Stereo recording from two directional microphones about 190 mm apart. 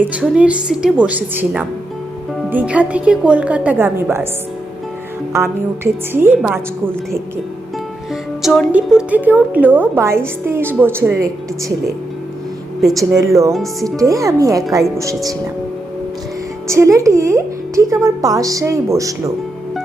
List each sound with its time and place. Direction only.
0.0 s a woman's voice: 5° right (ahead or behind)
5.3 s a woman's voice: 15° right (ahead or behind)
8.4 s a woman's voice: centre (ahead or behind)
13.1 s a woman's voice: 15° right (ahead or behind)
16.6 s a woman's voice: 15° right (ahead or behind)